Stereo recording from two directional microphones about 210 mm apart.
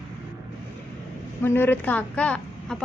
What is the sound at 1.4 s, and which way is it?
A woman's voice, 10° left (ahead or behind).